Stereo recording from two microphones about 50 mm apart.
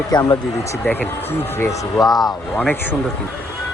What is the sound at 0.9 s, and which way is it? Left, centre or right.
Speech, left.